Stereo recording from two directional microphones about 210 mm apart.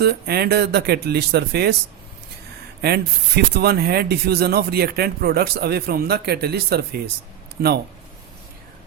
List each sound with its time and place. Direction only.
0.0 s speech: 50° right (ahead or behind)
2.8 s speech: 50° right (ahead or behind)